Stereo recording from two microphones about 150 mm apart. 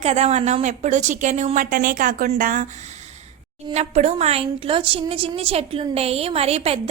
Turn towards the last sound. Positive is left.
turn(degrees=-45)  # may be behind; listen again after turning